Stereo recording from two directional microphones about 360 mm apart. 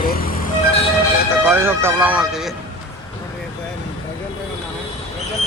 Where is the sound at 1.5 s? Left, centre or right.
Centre.